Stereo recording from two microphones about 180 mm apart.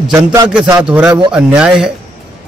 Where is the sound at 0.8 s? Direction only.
5° right (ahead or behind).